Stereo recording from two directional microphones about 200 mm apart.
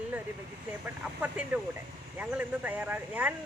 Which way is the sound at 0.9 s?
10° right (ahead or behind).